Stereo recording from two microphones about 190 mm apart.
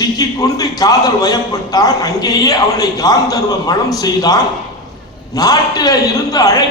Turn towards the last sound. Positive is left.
turn(degrees=20)  # may be behind; listen again after turning